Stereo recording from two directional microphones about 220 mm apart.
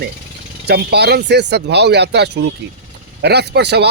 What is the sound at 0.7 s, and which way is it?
Speech, 50° right (ahead or behind).